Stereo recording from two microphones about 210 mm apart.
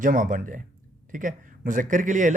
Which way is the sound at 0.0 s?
40° right (ahead or behind).